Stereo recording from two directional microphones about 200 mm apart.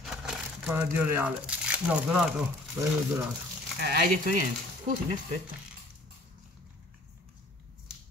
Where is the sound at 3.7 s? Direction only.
50° right (ahead or behind).